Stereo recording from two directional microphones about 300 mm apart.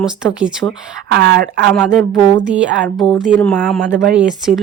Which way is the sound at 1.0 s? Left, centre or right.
Right.